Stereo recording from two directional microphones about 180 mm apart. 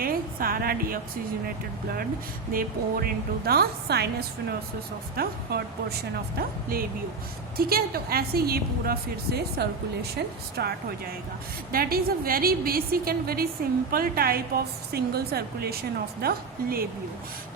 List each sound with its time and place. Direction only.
0.0 s a woman's voice: 55° right (ahead or behind)
2.5 s a woman's voice: 55° right (ahead or behind)
7.5 s a woman's voice: 55° right (ahead or behind)